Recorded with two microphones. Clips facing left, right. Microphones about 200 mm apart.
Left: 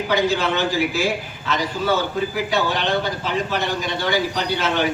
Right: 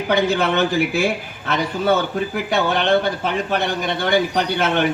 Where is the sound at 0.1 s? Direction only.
55° right (ahead or behind).